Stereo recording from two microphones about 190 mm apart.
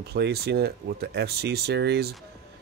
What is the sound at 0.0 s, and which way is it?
Speech, 60° right (ahead or behind).